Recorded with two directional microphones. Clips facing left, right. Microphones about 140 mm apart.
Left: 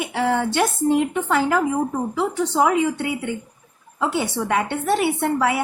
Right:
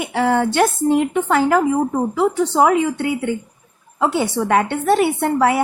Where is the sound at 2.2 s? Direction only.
50° right (ahead or behind).